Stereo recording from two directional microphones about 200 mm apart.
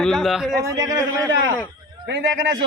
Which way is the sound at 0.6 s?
20° right (ahead or behind).